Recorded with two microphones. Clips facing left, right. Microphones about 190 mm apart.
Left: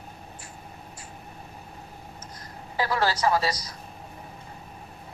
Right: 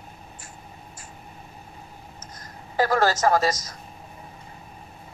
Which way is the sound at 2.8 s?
45° right (ahead or behind).